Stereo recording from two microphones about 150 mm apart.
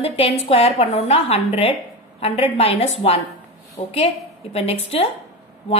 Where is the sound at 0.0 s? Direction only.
40° left (ahead or behind).